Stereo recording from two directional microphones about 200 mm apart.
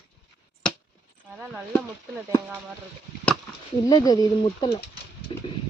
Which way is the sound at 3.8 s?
20° left (ahead or behind).